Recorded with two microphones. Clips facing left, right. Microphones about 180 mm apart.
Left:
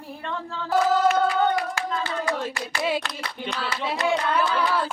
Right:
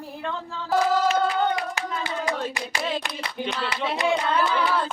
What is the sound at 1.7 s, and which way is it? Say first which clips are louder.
Hands: left 2 dB; 15° right (ahead or behind).